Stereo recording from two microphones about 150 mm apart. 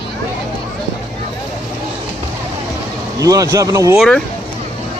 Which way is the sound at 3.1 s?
25° right (ahead or behind).